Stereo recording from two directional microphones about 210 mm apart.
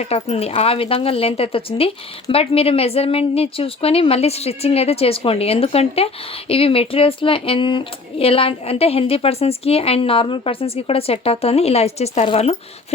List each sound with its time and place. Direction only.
0.0 s speech: 30° left (ahead or behind)